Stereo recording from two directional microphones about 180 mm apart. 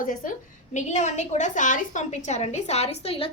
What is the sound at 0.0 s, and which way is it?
A woman's voice, 50° left (ahead or behind).